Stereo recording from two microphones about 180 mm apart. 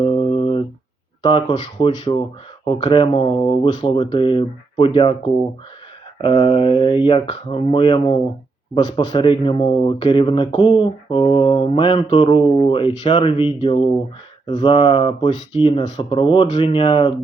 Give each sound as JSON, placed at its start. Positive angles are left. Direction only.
{"t": 0.0, "sound": "a sound", "side_deg": 30}
{"t": 1.2, "sound": "speech", "side_deg": 25}
{"t": 6.2, "sound": "speech", "side_deg": 25}